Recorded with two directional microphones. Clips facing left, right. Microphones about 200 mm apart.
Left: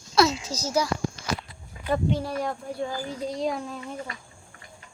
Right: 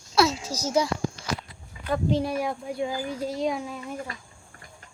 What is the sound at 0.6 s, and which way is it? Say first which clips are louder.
Speech: right 2 dB; 25° right (ahead or behind).